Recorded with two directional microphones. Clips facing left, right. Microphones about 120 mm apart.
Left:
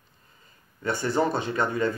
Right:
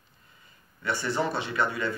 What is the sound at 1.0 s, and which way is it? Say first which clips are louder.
Speech: left 5 dB; 45° left (ahead or behind).